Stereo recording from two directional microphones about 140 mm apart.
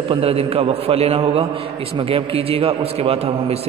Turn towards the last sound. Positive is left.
turn(degrees=-45)  # may be behind; listen again after turning